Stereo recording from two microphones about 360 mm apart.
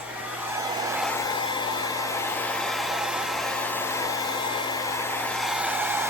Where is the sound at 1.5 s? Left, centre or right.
Centre.